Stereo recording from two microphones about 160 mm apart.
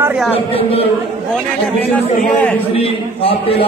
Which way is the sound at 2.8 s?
35° left (ahead or behind).